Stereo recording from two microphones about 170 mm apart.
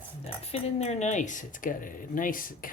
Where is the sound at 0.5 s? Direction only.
35° left (ahead or behind).